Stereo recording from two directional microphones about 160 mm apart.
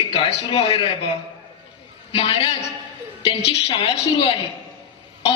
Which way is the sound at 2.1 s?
35° left (ahead or behind).